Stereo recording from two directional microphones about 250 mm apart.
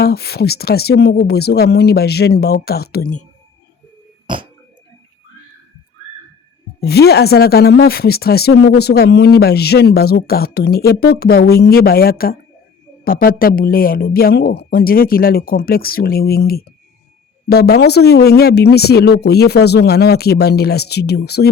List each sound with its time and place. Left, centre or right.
0.0 s speech: left
6.7 s speech: left